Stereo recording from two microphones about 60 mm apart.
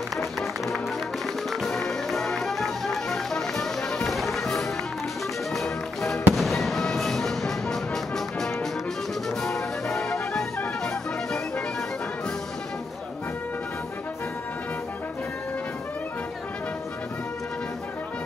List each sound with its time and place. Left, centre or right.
0.1 s music: centre
4.1 s music: centre
6.3 s fireworks: centre
9.3 s music: centre